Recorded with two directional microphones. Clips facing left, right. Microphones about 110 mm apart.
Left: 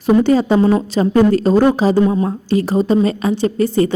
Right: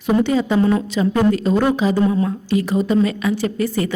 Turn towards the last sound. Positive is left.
turn(degrees=30)  # may be behind; listen again after turning